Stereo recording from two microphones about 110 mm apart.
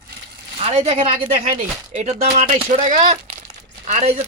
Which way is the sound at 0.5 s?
70° right (ahead or behind).